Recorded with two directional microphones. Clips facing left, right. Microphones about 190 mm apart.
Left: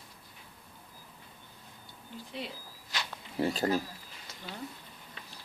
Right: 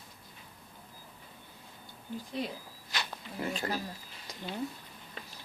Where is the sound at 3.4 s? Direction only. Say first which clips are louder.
Left 6 dB; 40° left (ahead or behind).